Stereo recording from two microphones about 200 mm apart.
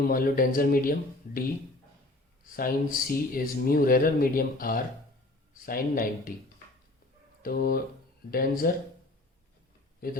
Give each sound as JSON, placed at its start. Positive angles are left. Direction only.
{"t": 0.1, "sound": "speech", "side_deg": 45}
{"t": 7.4, "sound": "speech", "side_deg": 45}
{"t": 10.0, "sound": "speech", "side_deg": 45}